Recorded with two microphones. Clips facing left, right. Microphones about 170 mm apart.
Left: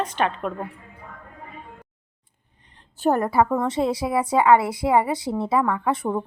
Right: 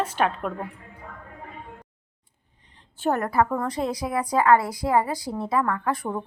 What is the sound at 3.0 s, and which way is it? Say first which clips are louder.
A woman's voice: left 3 dB; 30° left (ahead or behind).